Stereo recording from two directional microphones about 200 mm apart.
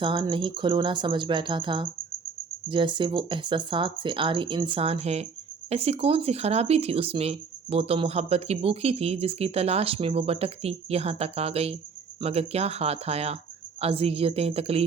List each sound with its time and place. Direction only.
0.0 s speech: 25° right (ahead or behind)